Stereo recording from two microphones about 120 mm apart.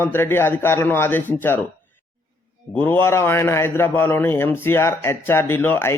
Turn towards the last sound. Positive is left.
turn(degrees=20)  # may be behind; listen again after turning